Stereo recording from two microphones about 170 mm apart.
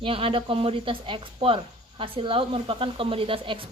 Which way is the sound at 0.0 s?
30° right (ahead or behind).